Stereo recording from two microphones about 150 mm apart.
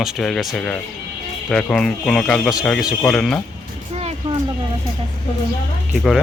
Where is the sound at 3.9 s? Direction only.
40° right (ahead or behind).